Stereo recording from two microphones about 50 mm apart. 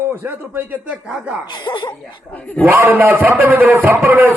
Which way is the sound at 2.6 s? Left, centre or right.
Right.